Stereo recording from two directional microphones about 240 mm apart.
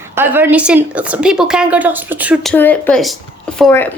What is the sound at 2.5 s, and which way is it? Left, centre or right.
Speech, centre.